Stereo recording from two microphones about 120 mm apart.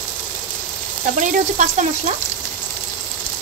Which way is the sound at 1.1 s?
90° right.